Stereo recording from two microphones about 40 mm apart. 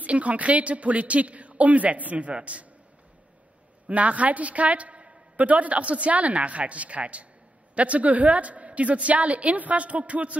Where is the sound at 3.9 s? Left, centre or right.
Right.